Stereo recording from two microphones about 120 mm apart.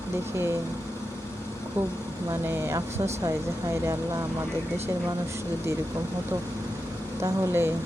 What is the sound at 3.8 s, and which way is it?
Speech, 25° right (ahead or behind).